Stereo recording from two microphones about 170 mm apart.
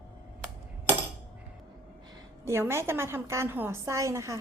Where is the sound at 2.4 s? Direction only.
15° right (ahead or behind).